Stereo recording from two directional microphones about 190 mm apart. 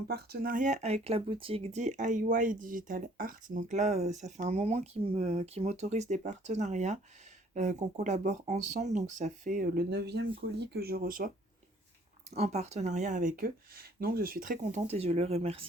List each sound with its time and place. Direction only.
0.1 s speech: 55° right (ahead or behind)
12.3 s speech: 35° right (ahead or behind)